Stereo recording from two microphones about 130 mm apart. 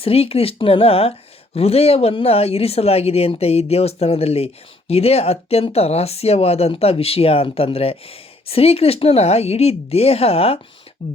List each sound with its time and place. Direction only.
0.0 s speech: 50° left (ahead or behind)